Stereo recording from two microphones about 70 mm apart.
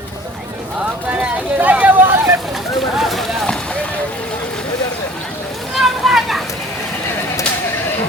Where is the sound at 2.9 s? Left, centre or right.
Centre.